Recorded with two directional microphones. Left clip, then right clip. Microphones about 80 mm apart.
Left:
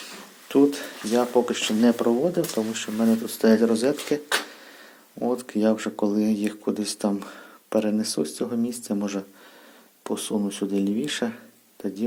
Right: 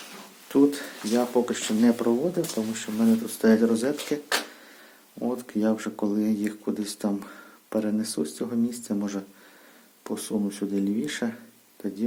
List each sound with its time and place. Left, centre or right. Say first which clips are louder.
0.4 s speech: left 2 dB; centre
3.2 s speech: left 3 dB; centre
5.2 s speech: left 4 dB; left